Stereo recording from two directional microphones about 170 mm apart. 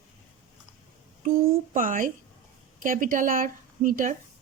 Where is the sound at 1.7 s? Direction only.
50° right (ahead or behind).